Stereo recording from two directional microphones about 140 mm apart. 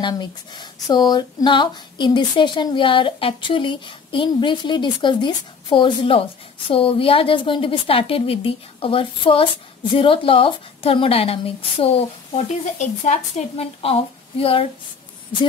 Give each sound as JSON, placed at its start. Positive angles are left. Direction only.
{"t": 0.0, "sound": "a woman's voice", "side_deg": 30}